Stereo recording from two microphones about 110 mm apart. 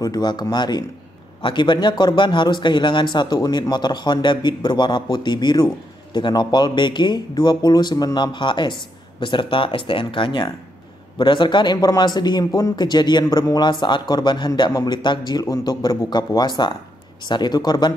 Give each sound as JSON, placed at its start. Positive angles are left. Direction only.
{"t": 0.0, "sound": "a man's voice", "side_deg": 40}